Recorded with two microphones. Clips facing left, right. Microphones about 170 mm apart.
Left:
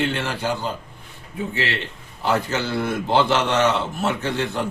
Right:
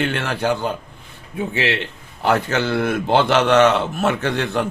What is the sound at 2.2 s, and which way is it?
A man's voice, 65° right (ahead or behind).